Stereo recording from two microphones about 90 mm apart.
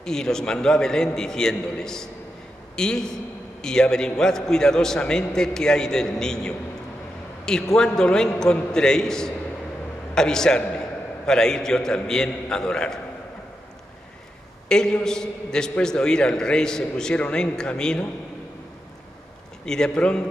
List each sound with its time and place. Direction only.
0.0 s a man's voice: 5° left (ahead or behind)
7.7 s a man's voice: 5° left (ahead or behind)
14.7 s a man's voice: 10° left (ahead or behind)
19.6 s a man's voice: 5° left (ahead or behind)